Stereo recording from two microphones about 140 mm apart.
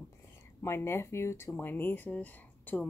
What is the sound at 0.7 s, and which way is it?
Speech, 15° left (ahead or behind).